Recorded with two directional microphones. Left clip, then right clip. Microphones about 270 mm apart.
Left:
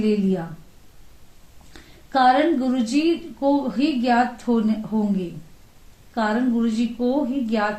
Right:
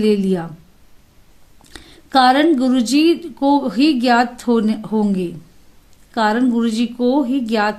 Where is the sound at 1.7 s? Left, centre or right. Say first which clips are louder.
Right 7 dB; right.